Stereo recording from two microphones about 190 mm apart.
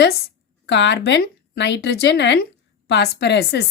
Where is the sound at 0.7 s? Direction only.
65° left (ahead or behind).